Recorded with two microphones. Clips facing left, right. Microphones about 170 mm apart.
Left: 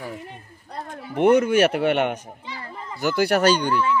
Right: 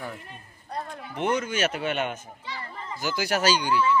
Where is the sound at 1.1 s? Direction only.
60° left (ahead or behind).